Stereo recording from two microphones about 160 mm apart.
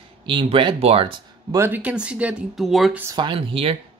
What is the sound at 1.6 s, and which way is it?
Speech, 10° right (ahead or behind).